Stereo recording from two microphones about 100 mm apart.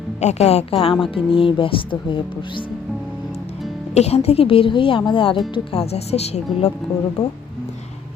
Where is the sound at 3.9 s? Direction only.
90° left; by 5.4 s 60° left (ahead or behind).